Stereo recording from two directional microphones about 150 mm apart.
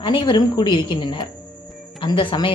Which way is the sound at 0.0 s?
30° left (ahead or behind).